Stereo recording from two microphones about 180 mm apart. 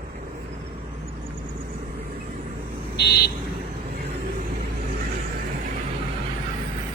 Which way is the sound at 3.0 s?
65° left (ahead or behind).